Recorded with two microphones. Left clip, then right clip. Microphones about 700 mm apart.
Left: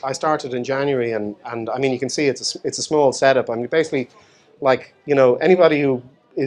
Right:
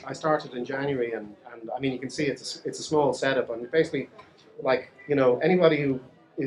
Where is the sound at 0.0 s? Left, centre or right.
Left.